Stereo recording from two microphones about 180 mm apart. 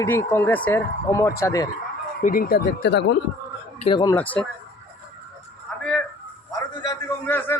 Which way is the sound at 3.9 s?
25° left (ahead or behind).